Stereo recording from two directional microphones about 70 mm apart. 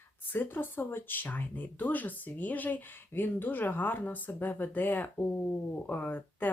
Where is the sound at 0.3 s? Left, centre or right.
Left.